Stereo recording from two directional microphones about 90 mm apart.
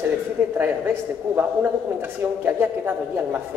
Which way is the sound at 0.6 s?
20° right (ahead or behind).